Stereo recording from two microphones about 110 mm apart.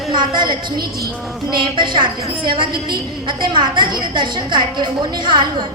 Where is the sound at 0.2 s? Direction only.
45° right (ahead or behind).